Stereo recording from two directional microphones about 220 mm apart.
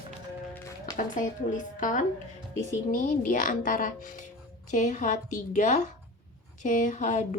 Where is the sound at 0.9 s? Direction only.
35° left (ahead or behind).